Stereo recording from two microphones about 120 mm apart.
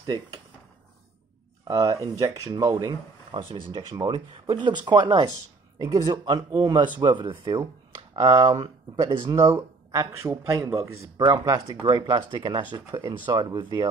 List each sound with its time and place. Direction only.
1.7 s speech: 30° right (ahead or behind)
11.1 s speech: 35° right (ahead or behind)
13.6 s speech: 40° right (ahead or behind)